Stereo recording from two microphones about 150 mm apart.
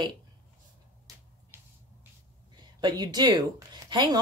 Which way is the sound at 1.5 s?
15° right (ahead or behind).